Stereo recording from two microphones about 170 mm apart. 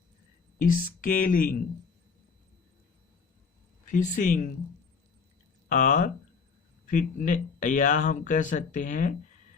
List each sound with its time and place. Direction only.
0.6 s speech: 55° left (ahead or behind)
3.9 s speech: 45° left (ahead or behind)
5.6 s speech: 45° left (ahead or behind)